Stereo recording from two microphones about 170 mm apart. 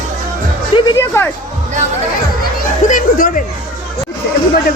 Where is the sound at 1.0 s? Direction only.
15° left (ahead or behind).